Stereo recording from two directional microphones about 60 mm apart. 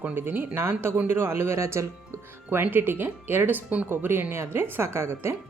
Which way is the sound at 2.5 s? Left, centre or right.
Right.